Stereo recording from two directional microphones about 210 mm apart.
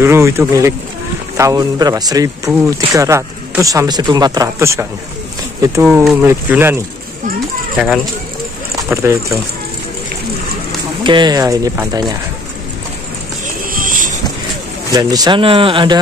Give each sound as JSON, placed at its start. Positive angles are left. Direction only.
{"t": 0.0, "sound": "a man's voice", "side_deg": -15}
{"t": 11.1, "sound": "a man's voice", "side_deg": -20}
{"t": 13.7, "sound": "vehicle", "side_deg": -40}
{"t": 14.9, "sound": "speech", "side_deg": -15}